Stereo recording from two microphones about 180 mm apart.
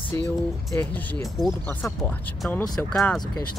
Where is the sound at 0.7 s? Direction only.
10° left (ahead or behind).